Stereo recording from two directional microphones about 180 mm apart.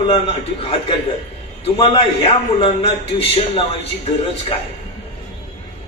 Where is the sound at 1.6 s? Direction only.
35° left (ahead or behind).